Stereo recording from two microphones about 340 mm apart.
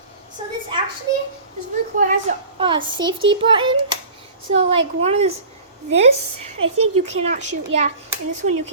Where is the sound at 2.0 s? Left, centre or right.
Centre.